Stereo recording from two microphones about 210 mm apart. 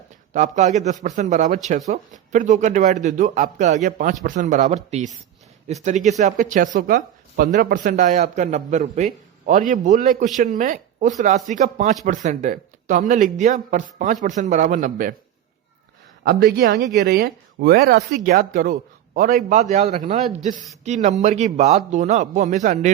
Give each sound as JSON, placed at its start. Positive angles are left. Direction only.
{"t": 0.3, "sound": "speech", "side_deg": -35}
{"t": 16.2, "sound": "speech", "side_deg": -45}